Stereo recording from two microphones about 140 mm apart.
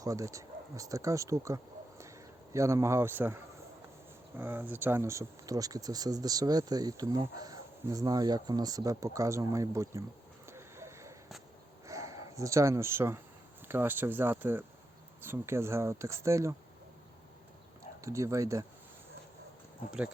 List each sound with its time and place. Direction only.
0.0 s speech: 25° right (ahead or behind)
10.4 s a sound: 20° right (ahead or behind)
13.7 s speech: 15° right (ahead or behind)
18.0 s speech: 20° right (ahead or behind)